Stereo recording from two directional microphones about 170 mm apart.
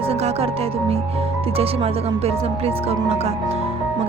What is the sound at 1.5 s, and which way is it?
Speech, 35° right (ahead or behind).